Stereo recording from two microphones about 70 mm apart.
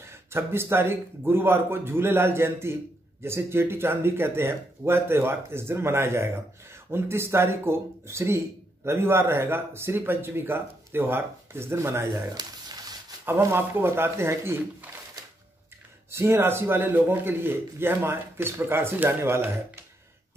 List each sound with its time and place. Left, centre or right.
0.0 s a man's voice: right
12.4 s a sound: right
13.2 s a man's voice: right
16.1 s a man's voice: right